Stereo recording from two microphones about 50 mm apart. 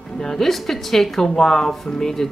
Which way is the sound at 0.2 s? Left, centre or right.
Centre.